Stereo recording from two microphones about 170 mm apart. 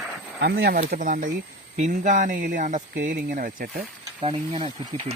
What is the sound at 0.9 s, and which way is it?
Speech, 55° right (ahead or behind).